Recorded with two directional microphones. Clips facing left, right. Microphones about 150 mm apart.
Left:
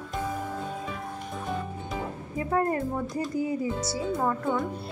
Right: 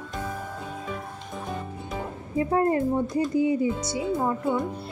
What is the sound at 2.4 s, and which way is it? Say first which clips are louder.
Speech: right 4 dB; 25° right (ahead or behind).